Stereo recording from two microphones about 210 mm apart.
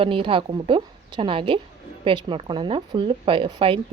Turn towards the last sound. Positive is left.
turn(degrees=-25)  # may be behind; listen again after turning